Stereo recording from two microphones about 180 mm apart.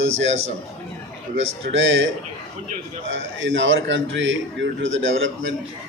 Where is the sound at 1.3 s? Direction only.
90° right.